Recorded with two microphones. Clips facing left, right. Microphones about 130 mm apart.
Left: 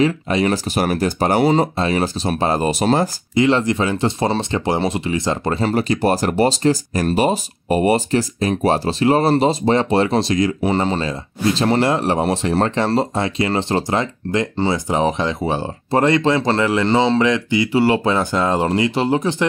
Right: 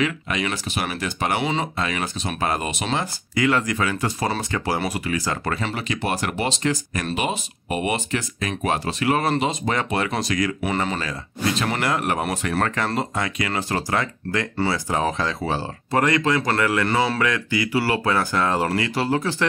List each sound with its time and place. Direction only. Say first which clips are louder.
0.0 s speech: left 7 dB; 35° left (ahead or behind)
3.3 s speech: left 5 dB; 25° left (ahead or behind)
5.6 s speech: left 9 dB; 40° left (ahead or behind); by 19.4 s 20° left (ahead or behind)